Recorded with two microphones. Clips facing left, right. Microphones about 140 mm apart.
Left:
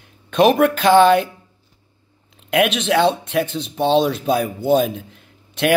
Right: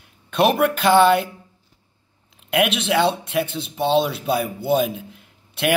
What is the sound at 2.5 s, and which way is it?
Speech, 10° right (ahead or behind).